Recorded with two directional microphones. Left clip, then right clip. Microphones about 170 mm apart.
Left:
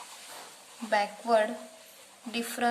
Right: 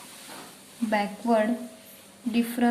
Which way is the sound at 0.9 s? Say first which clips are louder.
Right 1 dB; 25° left (ahead or behind).